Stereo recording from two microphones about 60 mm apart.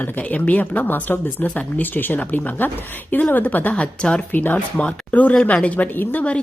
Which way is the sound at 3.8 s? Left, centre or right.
Centre.